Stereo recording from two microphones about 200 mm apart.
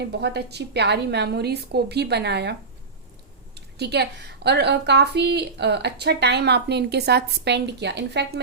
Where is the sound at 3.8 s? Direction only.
55° right (ahead or behind).